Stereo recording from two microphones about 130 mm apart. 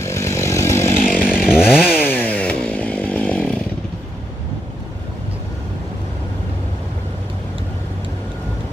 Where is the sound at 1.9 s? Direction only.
15° left (ahead or behind).